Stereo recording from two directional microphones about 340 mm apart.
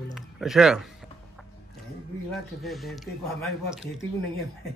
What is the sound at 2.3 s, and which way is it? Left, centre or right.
Speech, centre.